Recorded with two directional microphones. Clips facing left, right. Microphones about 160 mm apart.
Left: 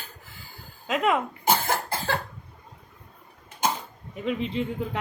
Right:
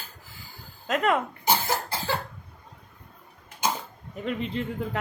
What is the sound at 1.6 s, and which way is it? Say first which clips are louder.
Cough: left 1 dB; 50° left (ahead or behind).